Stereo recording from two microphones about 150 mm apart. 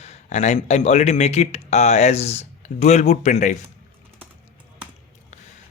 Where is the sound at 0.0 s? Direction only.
45° left (ahead or behind).